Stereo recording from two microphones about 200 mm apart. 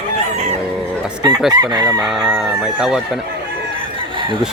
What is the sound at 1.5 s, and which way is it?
Chicken, 20° right (ahead or behind).